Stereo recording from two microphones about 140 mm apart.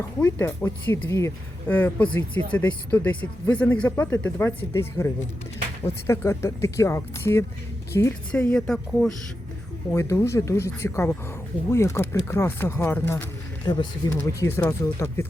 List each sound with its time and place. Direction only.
0.2 s speech: 15° left (ahead or behind)
8.3 s speech: 5° left (ahead or behind)
9.9 s speech: 20° left (ahead or behind)
13.7 s speech: 30° left (ahead or behind)
14.1 s speech: 20° left (ahead or behind)